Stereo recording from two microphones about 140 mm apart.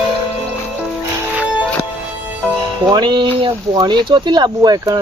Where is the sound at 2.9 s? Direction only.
30° right (ahead or behind).